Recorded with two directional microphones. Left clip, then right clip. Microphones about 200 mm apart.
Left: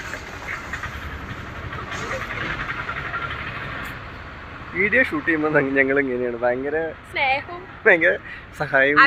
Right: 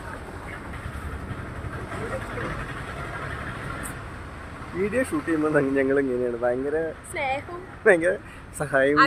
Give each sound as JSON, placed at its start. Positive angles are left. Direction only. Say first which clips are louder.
{"t": 4.8, "sound": "speech", "louder": "left 7 dB", "side_deg": 0}
{"t": 7.1, "sound": "speech", "louder": "left 8 dB", "side_deg": -20}
{"t": 7.9, "sound": "a man's voice", "louder": "left 3 dB", "side_deg": 0}
{"t": 8.6, "sound": "speech", "louder": "left 3 dB", "side_deg": -10}